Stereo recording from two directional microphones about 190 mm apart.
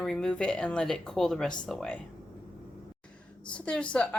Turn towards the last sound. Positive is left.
turn(degrees=5)  # may be behind; listen again after turning